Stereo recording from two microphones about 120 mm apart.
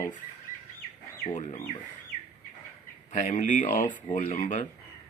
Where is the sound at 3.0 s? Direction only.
85° left.